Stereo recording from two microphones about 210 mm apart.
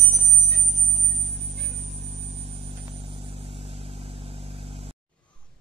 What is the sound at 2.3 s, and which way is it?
Vehicle, 30° right (ahead or behind).